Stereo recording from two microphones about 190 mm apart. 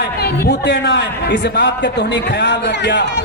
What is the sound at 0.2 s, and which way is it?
A man's voice, 60° left (ahead or behind).